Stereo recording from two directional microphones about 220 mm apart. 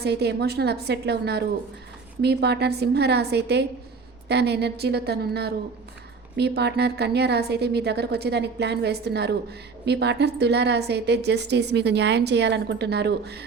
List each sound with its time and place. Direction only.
0.0 s a woman's voice: 50° right (ahead or behind)